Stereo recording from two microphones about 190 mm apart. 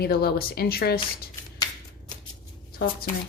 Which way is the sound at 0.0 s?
55° left (ahead or behind).